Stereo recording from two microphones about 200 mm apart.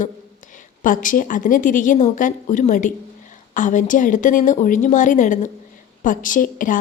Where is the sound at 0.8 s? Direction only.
40° left (ahead or behind).